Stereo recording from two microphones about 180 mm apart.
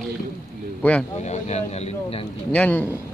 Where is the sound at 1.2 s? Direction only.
40° left (ahead or behind).